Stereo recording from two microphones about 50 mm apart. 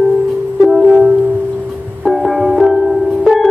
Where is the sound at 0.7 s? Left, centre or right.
Centre.